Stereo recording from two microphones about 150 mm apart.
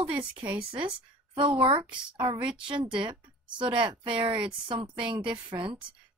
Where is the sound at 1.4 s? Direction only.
35° right (ahead or behind).